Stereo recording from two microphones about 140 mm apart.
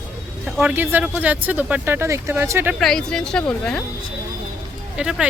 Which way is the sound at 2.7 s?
5° left (ahead or behind).